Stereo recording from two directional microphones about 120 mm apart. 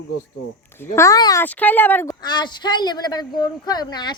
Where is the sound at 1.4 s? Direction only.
15° left (ahead or behind).